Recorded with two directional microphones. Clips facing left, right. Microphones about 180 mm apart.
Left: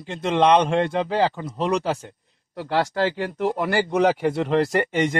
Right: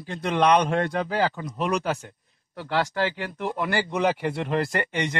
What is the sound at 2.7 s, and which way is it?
Speech, 40° left (ahead or behind).